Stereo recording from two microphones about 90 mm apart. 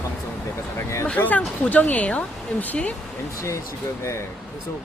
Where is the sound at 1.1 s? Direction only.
15° left (ahead or behind).